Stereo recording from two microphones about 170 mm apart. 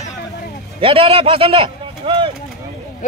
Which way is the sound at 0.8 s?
35° right (ahead or behind).